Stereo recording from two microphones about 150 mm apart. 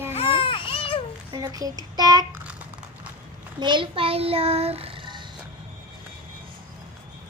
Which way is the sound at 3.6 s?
35° right (ahead or behind).